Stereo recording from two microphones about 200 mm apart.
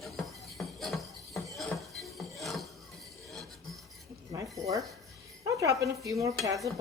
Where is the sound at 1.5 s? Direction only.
Centre (ahead or behind).